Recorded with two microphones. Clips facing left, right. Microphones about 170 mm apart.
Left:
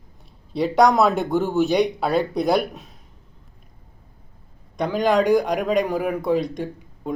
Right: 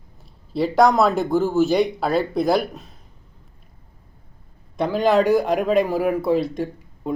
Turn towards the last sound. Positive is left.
turn(degrees=-5)  # may be behind; listen again after turning